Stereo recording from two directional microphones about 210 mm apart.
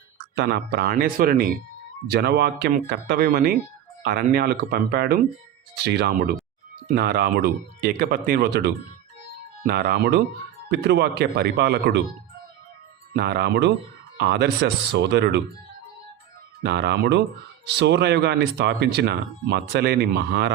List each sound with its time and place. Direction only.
0.3 s speech: 50° right (ahead or behind)
13.1 s speech: 50° right (ahead or behind)
16.6 s speech: 50° right (ahead or behind)